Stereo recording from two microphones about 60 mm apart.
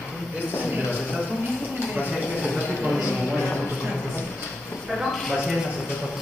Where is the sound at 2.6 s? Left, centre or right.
Centre.